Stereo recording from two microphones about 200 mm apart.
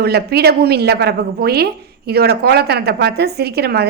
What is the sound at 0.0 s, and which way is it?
A woman's voice, 55° right (ahead or behind).